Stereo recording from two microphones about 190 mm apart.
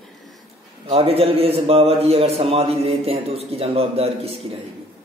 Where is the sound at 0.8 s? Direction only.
30° right (ahead or behind).